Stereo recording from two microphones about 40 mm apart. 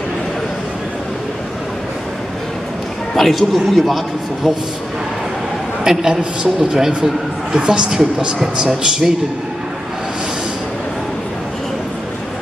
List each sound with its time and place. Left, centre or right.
3.2 s a man's voice: centre
5.9 s a man's voice: centre